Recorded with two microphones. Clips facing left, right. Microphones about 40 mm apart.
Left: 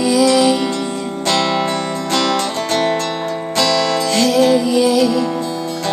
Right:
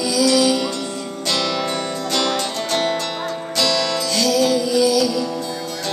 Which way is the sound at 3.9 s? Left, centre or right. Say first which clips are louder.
Left 4 dB; left.